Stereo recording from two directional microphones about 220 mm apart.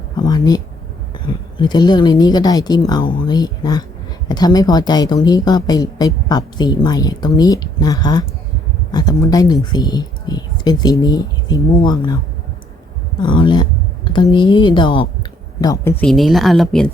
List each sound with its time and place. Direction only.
0.2 s speech: 15° left (ahead or behind); by 16.9 s centre (ahead or behind)